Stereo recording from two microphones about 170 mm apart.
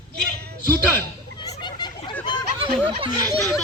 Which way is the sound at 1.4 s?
25° left (ahead or behind).